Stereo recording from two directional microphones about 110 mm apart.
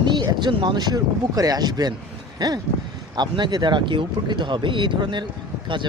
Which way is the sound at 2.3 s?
35° right (ahead or behind).